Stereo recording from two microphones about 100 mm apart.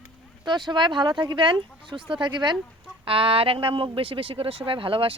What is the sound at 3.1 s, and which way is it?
Speech, 65° right (ahead or behind).